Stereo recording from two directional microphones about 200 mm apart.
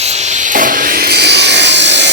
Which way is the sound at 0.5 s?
45° right (ahead or behind).